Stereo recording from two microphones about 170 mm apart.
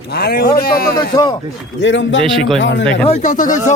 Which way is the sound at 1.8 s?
90° left.